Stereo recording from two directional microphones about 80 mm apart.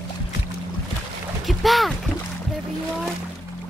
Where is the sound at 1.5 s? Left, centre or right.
Centre.